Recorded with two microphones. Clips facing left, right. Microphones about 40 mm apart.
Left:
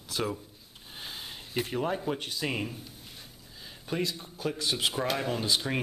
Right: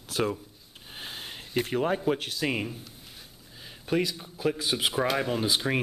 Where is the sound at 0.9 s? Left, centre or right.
Centre.